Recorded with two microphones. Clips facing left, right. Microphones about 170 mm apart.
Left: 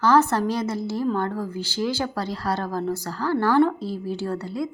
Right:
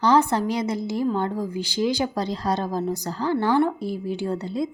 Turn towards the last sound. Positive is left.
turn(degrees=-20)  # may be behind; listen again after turning